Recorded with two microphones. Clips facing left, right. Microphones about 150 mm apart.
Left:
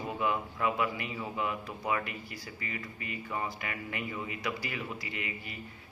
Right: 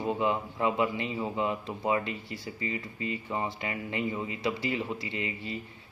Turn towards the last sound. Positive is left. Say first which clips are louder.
# right 6 dB
turn(degrees=-25)  # may be behind; listen again after turning